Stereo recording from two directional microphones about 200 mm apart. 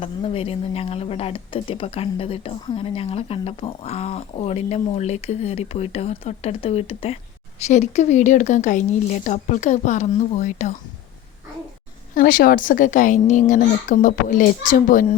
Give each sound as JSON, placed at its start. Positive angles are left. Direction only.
{"t": 0.0, "sound": "speech", "side_deg": 30}
{"t": 12.1, "sound": "speech", "side_deg": 50}